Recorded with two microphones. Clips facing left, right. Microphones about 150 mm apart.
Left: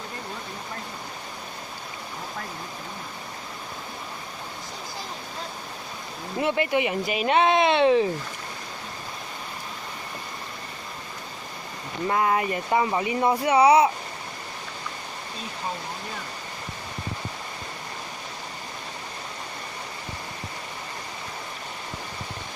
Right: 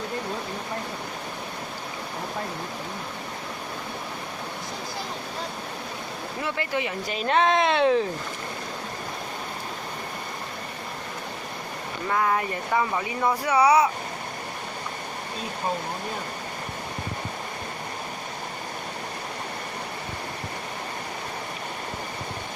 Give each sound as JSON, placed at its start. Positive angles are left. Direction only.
{"t": 6.4, "sound": "speech", "side_deg": 15}
{"t": 12.0, "sound": "speech", "side_deg": 25}